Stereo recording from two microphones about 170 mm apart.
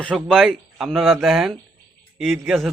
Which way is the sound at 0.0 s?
5° left (ahead or behind).